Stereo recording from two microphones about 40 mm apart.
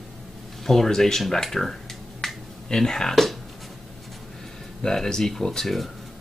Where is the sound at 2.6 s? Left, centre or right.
Centre.